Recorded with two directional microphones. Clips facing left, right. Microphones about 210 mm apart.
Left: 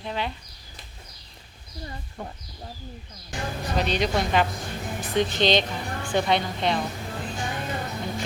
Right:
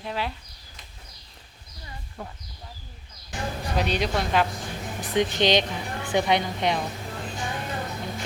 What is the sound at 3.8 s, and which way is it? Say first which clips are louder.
Speech: left 1 dB; 5° right (ahead or behind).